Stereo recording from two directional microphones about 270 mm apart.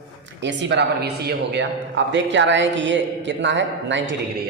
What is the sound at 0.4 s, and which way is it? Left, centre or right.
Speech, right.